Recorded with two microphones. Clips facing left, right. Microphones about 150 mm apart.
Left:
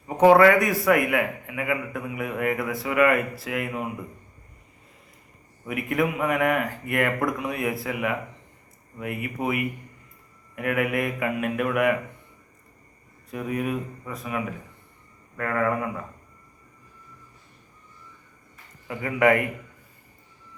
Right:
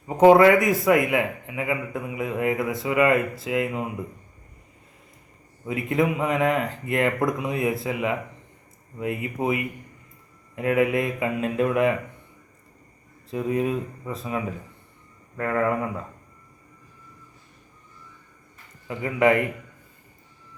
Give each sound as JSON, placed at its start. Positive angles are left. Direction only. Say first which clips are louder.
{"t": 0.2, "sound": "a man's voice", "louder": "right 1 dB", "side_deg": -20}
{"t": 5.6, "sound": "a man's voice", "louder": "right 2 dB", "side_deg": -25}
{"t": 13.3, "sound": "a man's voice", "louder": "right 3 dB", "side_deg": -25}
{"t": 18.9, "sound": "a man's voice", "louder": "even", "side_deg": -20}